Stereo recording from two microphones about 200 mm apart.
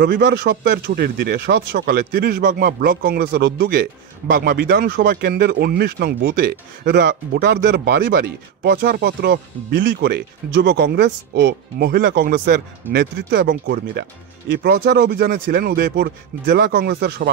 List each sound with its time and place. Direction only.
0.0 s speech: 55° right (ahead or behind)